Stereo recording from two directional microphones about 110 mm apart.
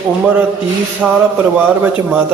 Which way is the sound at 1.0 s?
10° right (ahead or behind).